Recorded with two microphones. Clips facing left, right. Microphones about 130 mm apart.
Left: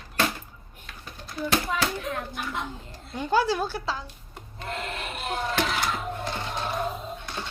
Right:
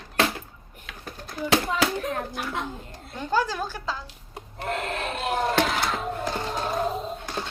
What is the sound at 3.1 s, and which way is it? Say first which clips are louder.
Speech: left 2 dB; 10° left (ahead or behind).